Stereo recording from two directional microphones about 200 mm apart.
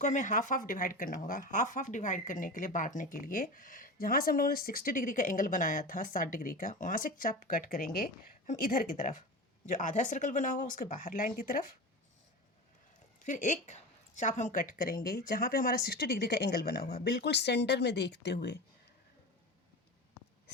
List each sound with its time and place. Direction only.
0.0 s speech: 40° left (ahead or behind)
13.2 s speech: 40° left (ahead or behind); by 18.6 s 55° left (ahead or behind)